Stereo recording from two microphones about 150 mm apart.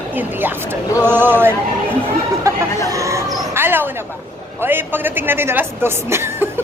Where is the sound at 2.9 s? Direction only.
20° right (ahead or behind).